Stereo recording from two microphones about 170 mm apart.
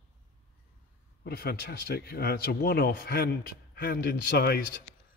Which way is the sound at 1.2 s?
65° left (ahead or behind).